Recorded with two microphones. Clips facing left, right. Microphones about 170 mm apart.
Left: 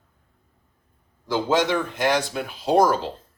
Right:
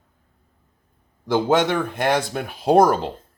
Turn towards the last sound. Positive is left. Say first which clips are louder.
# right 3 dB
turn(degrees=-55)  # may be behind; listen again after turning